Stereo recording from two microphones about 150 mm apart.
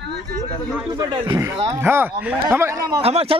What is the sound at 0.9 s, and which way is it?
Speech, 30° right (ahead or behind).